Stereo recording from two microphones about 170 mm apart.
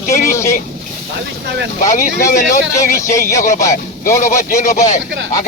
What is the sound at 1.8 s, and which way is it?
Speech, 50° left (ahead or behind).